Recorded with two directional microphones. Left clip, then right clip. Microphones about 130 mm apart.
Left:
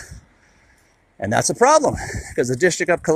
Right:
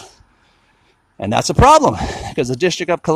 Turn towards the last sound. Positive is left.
turn(degrees=-15)  # may be behind; listen again after turning